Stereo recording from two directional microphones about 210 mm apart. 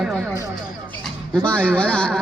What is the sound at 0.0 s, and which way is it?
Music, 5° right (ahead or behind).